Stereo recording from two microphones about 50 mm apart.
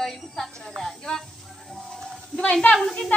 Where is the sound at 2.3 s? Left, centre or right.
Centre.